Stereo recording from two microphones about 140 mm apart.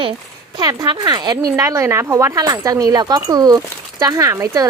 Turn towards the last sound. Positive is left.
turn(degrees=-20)  # may be behind; listen again after turning